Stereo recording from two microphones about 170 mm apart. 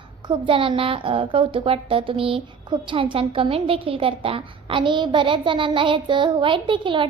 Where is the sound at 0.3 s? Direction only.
30° right (ahead or behind).